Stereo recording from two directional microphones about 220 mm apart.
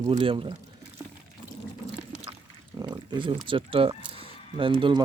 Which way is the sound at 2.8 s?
20° right (ahead or behind).